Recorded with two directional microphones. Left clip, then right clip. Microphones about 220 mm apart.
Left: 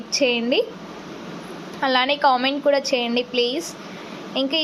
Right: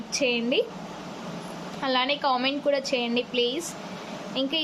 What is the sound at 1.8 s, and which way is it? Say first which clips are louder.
A woman's voice: left 7 dB; 5° left (ahead or behind).